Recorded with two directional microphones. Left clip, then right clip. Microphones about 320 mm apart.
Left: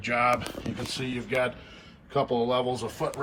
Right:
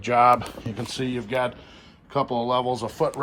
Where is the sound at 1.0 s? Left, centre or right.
Right.